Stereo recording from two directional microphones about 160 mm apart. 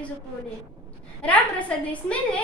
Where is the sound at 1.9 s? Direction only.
10° left (ahead or behind).